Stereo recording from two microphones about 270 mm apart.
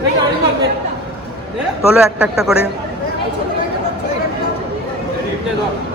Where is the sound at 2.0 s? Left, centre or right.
Centre.